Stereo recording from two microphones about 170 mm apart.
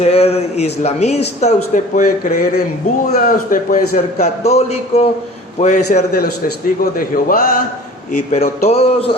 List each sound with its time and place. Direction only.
0.0 s a man's voice: 35° left (ahead or behind)
6.1 s a man's voice: 60° left (ahead or behind)
8.3 s a man's voice: 40° left (ahead or behind)